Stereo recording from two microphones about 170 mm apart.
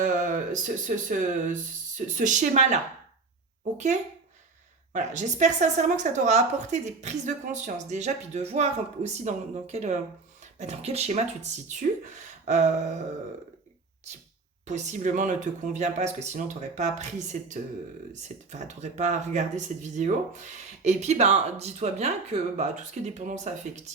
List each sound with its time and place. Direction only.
0.0 s speech: 45° right (ahead or behind)
4.9 s speech: 45° right (ahead or behind)
14.7 s speech: 45° right (ahead or behind)